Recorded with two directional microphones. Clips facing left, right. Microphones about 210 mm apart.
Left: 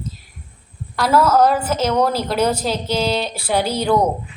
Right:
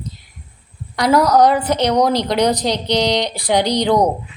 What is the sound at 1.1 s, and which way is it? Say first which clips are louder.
A woman's voice: right 2 dB; 15° right (ahead or behind).